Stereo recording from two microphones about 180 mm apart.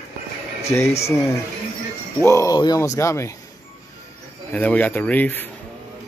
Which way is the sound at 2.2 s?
15° left (ahead or behind).